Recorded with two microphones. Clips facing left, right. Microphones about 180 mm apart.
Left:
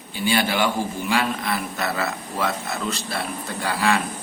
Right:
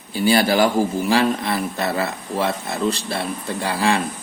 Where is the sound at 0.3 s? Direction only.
40° right (ahead or behind).